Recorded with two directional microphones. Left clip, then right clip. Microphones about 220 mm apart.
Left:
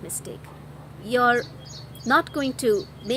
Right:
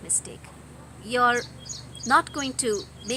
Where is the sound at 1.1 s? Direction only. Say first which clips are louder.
Left 2 dB; 20° left (ahead or behind).